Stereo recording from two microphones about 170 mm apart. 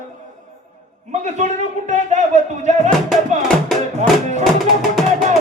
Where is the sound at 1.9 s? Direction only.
45° right (ahead or behind).